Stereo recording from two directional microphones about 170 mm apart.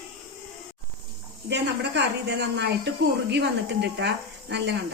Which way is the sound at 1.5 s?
90° right.